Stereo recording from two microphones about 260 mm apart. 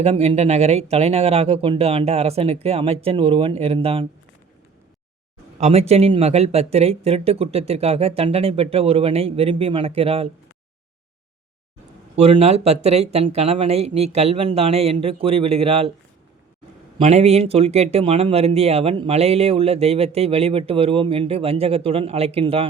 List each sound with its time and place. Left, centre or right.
0.0 s speech: right
5.5 s speech: right
12.1 s speech: right
17.0 s speech: right